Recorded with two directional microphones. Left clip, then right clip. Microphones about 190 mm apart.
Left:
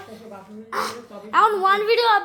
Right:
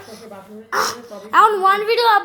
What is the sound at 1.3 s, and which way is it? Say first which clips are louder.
Speech: right 4 dB; centre (ahead or behind).